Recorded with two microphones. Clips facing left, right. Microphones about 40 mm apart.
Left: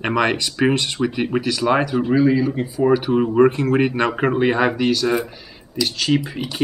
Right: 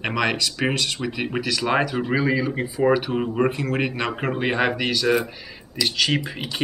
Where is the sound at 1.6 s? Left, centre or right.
Centre.